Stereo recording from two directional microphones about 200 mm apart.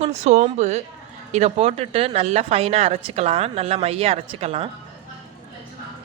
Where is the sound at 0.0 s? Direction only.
35° right (ahead or behind).